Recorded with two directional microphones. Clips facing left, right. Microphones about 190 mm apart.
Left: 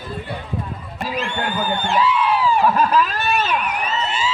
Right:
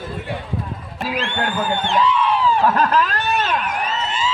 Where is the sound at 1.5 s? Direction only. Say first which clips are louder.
Even; centre (ahead or behind).